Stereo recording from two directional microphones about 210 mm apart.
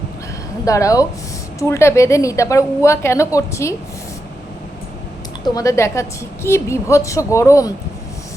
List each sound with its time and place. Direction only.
0.6 s a woman's voice: 15° left (ahead or behind)
5.4 s a woman's voice: 15° left (ahead or behind)